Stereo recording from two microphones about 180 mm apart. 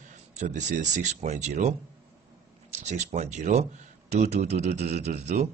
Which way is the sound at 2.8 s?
40° right (ahead or behind).